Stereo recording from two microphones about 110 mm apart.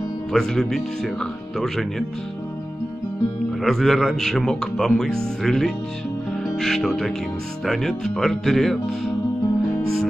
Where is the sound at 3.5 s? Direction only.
Centre (ahead or behind).